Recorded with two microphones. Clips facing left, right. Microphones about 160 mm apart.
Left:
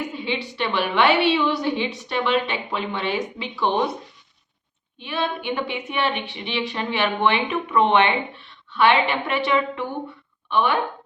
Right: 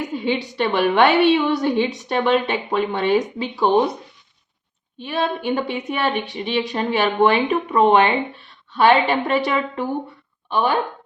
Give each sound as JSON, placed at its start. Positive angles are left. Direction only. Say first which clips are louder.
{"t": 0.3, "sound": "a woman's voice", "louder": "right 6 dB", "side_deg": -40}
{"t": 4.9, "sound": "a woman's voice", "louder": "right 3 dB", "side_deg": -40}